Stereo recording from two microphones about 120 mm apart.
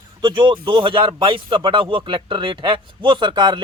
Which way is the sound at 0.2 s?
45° right (ahead or behind).